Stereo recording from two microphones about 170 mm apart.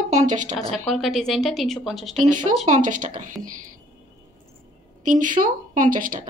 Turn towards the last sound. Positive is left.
turn(degrees=-55)  # may be behind; listen again after turning